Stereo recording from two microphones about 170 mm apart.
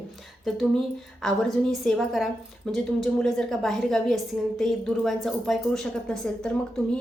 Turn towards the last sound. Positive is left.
turn(degrees=5)  # may be behind; listen again after turning